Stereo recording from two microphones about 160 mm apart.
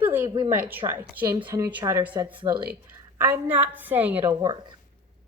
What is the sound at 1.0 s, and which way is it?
Speech, 10° right (ahead or behind).